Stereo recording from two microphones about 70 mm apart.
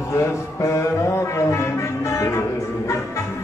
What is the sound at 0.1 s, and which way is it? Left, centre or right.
Music, left.